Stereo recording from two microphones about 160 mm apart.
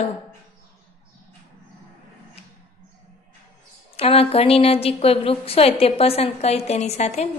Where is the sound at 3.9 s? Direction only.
40° left (ahead or behind).